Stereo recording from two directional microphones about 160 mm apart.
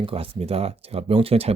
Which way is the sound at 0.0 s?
35° right (ahead or behind).